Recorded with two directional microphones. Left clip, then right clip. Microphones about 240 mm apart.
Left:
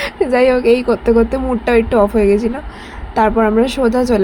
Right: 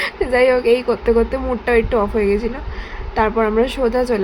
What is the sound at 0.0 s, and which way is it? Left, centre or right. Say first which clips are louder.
A woman's voice: left 2 dB; centre.